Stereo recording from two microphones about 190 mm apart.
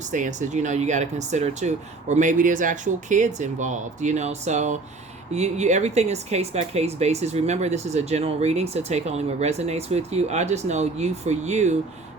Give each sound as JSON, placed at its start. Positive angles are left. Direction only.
{"t": 0.1, "sound": "speech", "side_deg": -40}